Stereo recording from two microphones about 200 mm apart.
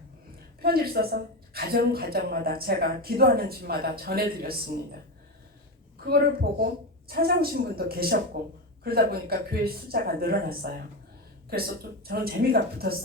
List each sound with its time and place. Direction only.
0.6 s a woman's voice: 50° right (ahead or behind)
6.0 s a woman's voice: 50° right (ahead or behind)
12.0 s a woman's voice: 50° right (ahead or behind)